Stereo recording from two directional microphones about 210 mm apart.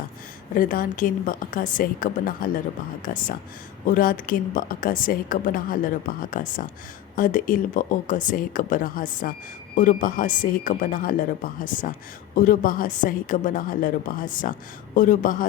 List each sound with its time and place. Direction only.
0.5 s a woman's voice: 40° left (ahead or behind)